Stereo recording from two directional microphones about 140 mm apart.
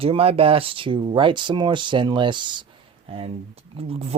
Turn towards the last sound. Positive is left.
turn(degrees=-45)  # may be behind; listen again after turning